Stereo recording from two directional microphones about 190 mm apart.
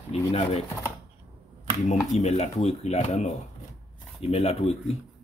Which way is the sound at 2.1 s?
35° left (ahead or behind).